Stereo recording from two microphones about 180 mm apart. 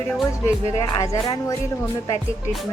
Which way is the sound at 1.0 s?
15° left (ahead or behind).